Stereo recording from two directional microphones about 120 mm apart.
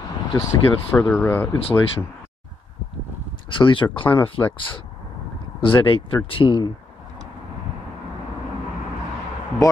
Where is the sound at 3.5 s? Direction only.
45° left (ahead or behind).